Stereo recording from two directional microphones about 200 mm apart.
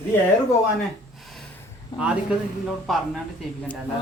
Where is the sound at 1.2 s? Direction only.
Centre (ahead or behind).